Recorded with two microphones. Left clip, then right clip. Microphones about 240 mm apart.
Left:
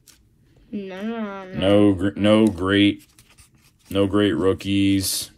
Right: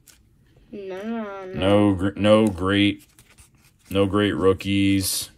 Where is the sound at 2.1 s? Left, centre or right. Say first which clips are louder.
Right 3 dB; centre.